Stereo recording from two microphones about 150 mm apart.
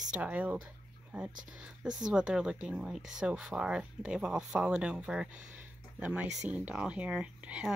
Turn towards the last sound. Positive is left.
turn(degrees=-10)  # may be behind; listen again after turning